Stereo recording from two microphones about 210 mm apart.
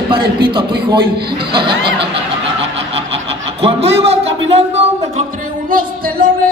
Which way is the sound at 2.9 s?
25° right (ahead or behind).